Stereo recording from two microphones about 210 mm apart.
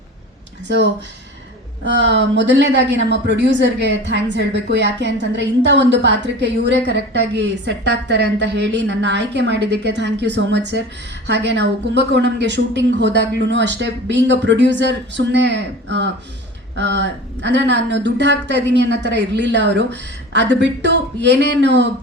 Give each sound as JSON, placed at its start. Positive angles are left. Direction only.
{"t": 1.8, "sound": "speech", "side_deg": -55}